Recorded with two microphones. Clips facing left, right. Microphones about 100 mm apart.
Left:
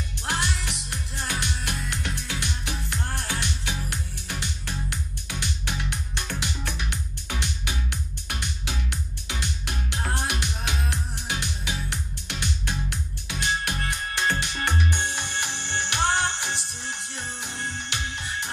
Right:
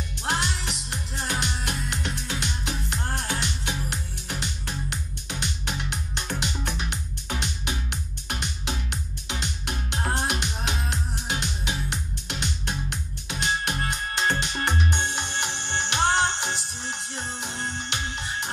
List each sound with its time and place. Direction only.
0.2 s music: 25° right (ahead or behind)